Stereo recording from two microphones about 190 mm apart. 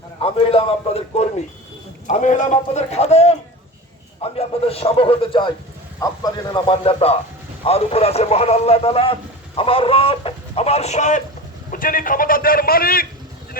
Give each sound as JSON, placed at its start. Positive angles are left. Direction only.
{"t": 0.2, "sound": "a man's voice", "side_deg": 30}